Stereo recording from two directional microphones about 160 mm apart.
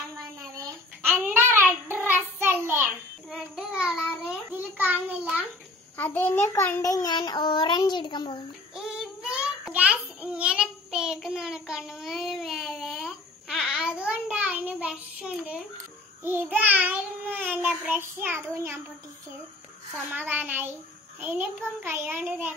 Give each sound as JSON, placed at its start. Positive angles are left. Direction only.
{"t": 1.0, "sound": "child singing", "side_deg": -10}
{"t": 5.9, "sound": "a child's voice", "side_deg": 10}
{"t": 8.7, "sound": "child singing", "side_deg": -5}
{"t": 16.2, "sound": "a child's voice", "side_deg": -10}
{"t": 20.1, "sound": "a child's voice", "side_deg": -10}